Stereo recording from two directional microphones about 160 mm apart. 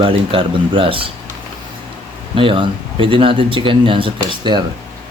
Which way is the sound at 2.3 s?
30° right (ahead or behind).